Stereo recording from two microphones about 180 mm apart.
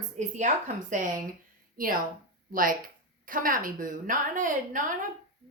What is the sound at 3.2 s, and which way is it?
A woman's voice, 50° right (ahead or behind).